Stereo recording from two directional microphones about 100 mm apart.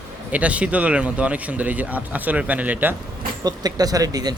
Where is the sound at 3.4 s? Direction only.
40° right (ahead or behind).